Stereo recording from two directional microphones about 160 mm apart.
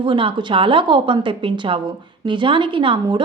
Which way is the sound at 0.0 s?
30° right (ahead or behind).